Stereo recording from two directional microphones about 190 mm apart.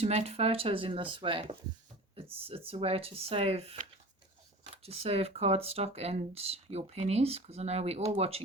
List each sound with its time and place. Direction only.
0.0 s speech: 35° right (ahead or behind)